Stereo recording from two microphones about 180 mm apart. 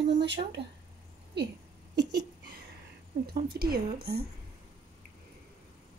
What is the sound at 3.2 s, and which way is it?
A woman's voice, 60° right (ahead or behind).